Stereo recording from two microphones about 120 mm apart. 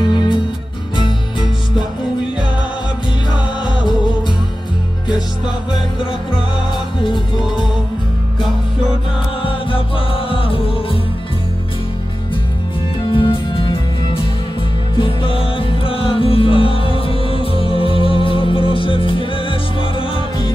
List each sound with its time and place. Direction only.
0.1 s music: 40° left (ahead or behind)
9.4 s music: 45° left (ahead or behind)
13.1 s music: 45° left (ahead or behind)